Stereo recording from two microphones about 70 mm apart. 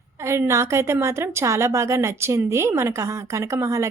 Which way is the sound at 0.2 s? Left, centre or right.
Right.